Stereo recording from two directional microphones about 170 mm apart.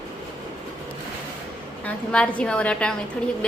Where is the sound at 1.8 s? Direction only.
5° left (ahead or behind).